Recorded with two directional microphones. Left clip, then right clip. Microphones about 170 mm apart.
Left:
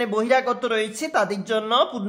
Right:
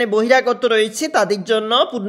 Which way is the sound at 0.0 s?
25° right (ahead or behind).